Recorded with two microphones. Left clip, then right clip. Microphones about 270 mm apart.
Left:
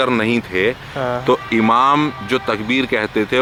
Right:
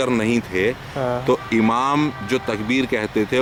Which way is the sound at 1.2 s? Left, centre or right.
Centre.